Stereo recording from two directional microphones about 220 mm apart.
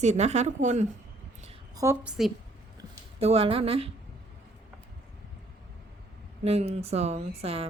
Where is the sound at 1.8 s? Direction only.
10° right (ahead or behind).